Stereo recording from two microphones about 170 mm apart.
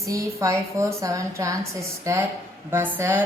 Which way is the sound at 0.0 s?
20° right (ahead or behind).